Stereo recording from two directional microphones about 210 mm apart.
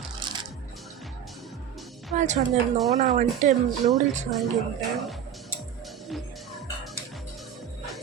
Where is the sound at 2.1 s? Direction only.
35° right (ahead or behind).